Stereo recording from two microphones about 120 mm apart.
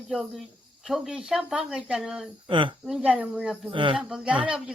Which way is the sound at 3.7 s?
45° right (ahead or behind).